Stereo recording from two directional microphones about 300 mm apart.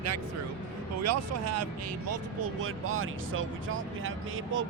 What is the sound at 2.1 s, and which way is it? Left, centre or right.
Speech, right.